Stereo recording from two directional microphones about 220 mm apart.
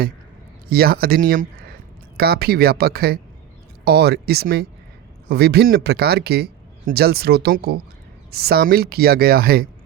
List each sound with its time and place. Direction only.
0.7 s a man's voice: 45° right (ahead or behind)